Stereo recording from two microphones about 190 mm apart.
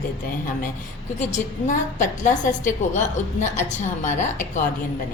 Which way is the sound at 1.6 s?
40° left (ahead or behind).